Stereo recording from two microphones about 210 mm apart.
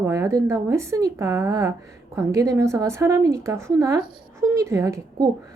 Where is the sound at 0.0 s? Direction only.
15° right (ahead or behind).